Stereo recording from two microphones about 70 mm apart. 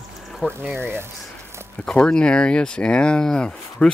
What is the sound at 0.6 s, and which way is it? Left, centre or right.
Speech, right.